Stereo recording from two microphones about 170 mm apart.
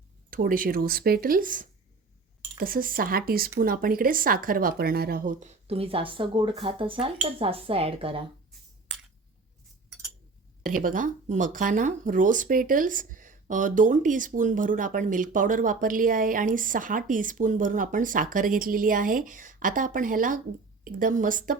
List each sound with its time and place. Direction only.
0.3 s speech: 55° right (ahead or behind); by 8.2 s 35° right (ahead or behind)
10.6 s speech: 55° right (ahead or behind)